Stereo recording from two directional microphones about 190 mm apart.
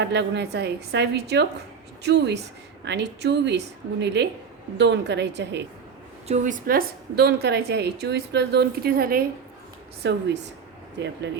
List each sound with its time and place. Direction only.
0.0 s a woman's voice: 65° right (ahead or behind)
6.2 s a woman's voice: 40° right (ahead or behind)
10.0 s a woman's voice: 70° right (ahead or behind)